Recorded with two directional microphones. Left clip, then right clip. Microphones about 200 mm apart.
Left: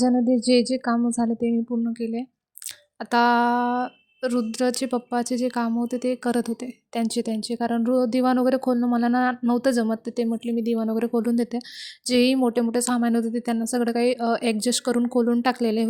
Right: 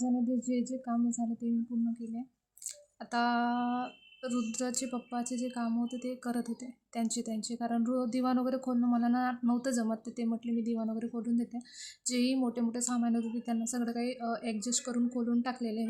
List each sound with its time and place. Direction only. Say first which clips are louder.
0.0 s speech: left 12 dB; 35° left (ahead or behind)